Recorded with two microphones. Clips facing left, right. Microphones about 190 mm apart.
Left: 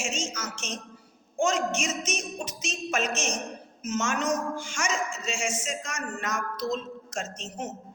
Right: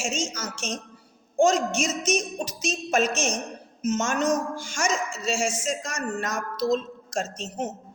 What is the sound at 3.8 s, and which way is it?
A woman's voice, 35° right (ahead or behind).